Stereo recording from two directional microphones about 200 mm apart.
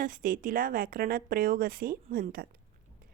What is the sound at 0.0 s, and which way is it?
Speech, 40° right (ahead or behind).